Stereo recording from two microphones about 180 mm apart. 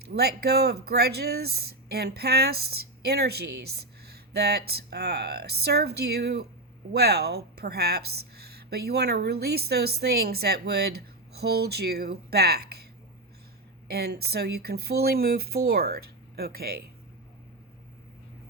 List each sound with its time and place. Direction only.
0.0 s speech: 60° right (ahead or behind)
13.9 s speech: 60° right (ahead or behind)